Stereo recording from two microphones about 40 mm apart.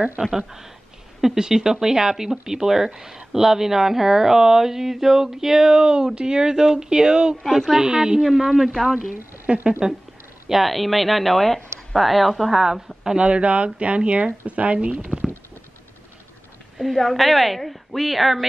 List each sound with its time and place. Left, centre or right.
0.2 s speech: centre
8.2 s speech: centre
9.5 s speech: right
10.5 s speech: centre
13.1 s speech: right
16.7 s speech: centre